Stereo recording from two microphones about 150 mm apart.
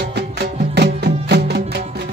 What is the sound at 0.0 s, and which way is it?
Music, 90° right.